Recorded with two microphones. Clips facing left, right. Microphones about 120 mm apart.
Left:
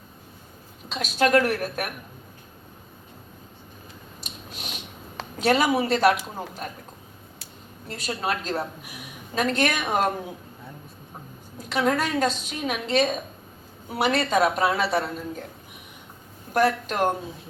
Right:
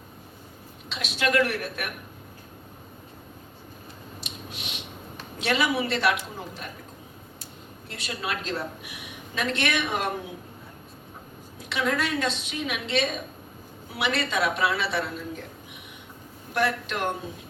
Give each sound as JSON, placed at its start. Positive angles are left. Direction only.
{"t": 0.9, "sound": "a woman's voice", "side_deg": 40}
{"t": 4.2, "sound": "a sound", "side_deg": 40}
{"t": 5.4, "sound": "a woman's voice", "side_deg": 40}
{"t": 7.9, "sound": "a woman's voice", "side_deg": 40}
{"t": 11.7, "sound": "a woman's voice", "side_deg": 40}
{"t": 16.6, "sound": "a woman's voice", "side_deg": 40}